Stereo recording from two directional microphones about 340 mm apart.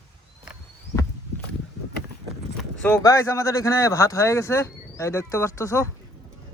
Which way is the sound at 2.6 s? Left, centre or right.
Centre.